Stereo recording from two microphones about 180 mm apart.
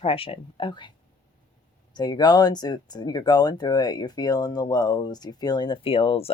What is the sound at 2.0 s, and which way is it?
Speech, 25° left (ahead or behind).